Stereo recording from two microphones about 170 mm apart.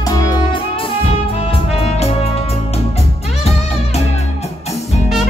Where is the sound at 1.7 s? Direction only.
35° left (ahead or behind).